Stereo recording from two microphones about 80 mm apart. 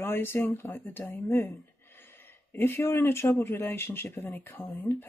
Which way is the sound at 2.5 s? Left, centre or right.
Left.